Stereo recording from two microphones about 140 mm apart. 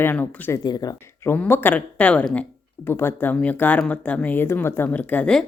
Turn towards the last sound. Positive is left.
turn(degrees=5)  # may be behind; listen again after turning